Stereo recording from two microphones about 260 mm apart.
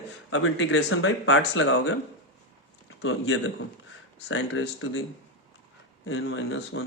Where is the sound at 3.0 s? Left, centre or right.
Left.